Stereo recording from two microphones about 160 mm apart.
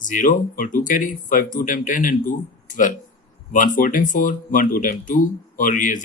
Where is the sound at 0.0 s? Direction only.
55° left (ahead or behind).